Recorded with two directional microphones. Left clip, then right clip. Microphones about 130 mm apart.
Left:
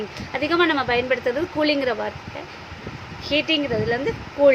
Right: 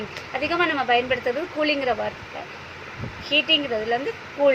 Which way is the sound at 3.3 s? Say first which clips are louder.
Right 1 dB; 40° left (ahead or behind).